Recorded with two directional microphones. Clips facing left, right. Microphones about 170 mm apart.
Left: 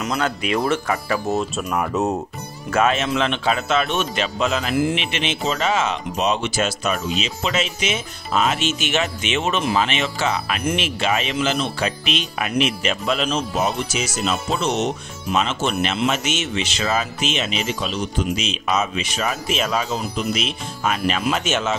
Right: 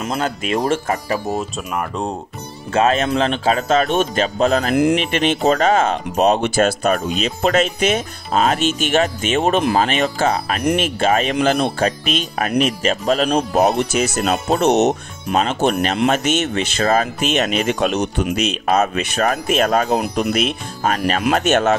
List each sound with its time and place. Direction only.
0.0 s speech: 30° right (ahead or behind)
0.7 s speech: 45° right (ahead or behind)
1.3 s speech: centre (ahead or behind)
2.7 s speech: 35° right (ahead or behind)
13.6 s speech: 60° right (ahead or behind)
15.3 s speech: 45° right (ahead or behind)
16.0 s speech: 55° right (ahead or behind)